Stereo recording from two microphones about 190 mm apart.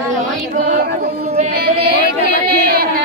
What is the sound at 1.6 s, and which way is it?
Speech, 55° right (ahead or behind).